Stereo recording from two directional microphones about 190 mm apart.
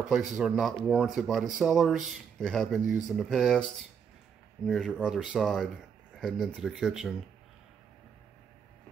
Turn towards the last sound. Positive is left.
turn(degrees=0)  # may be behind; listen again after turning